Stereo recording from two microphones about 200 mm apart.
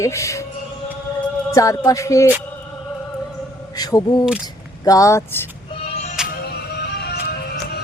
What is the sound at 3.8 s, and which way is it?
Speech, 20° left (ahead or behind).